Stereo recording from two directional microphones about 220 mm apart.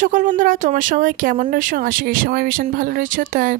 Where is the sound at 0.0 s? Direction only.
35° right (ahead or behind).